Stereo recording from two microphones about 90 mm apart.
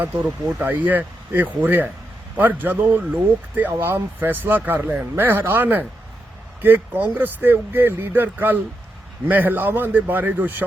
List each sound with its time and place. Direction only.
0.6 s speech: 20° right (ahead or behind)